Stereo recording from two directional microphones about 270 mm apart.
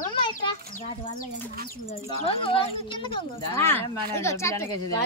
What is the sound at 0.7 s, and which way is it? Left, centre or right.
Speech, left.